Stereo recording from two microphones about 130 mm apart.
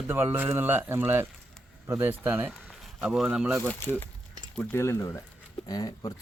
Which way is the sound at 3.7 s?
15° left (ahead or behind).